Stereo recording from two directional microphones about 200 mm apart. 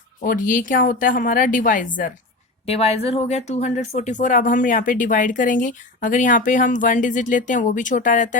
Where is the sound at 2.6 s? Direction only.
30° left (ahead or behind).